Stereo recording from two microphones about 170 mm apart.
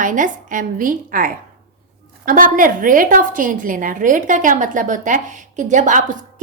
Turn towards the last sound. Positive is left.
turn(degrees=-45)  # may be behind; listen again after turning